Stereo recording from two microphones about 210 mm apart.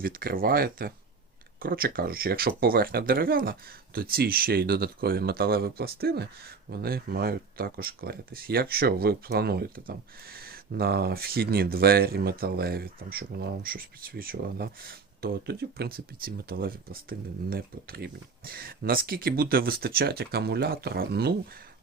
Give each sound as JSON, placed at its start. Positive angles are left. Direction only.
{"t": 0.0, "sound": "speech", "side_deg": -45}